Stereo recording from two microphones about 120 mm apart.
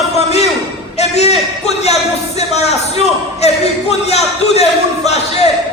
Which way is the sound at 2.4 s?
65° left (ahead or behind).